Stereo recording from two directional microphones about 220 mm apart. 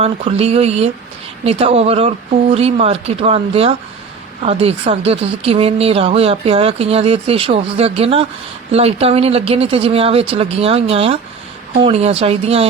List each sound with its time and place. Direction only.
0.0 s speech: 30° right (ahead or behind)